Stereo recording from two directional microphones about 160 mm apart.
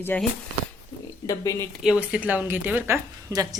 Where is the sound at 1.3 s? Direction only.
20° left (ahead or behind).